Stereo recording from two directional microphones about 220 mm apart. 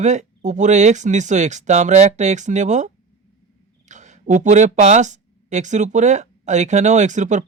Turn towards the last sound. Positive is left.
turn(degrees=-35)  # may be behind; listen again after turning